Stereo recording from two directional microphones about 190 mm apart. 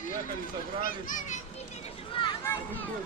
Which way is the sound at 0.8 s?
45° left (ahead or behind).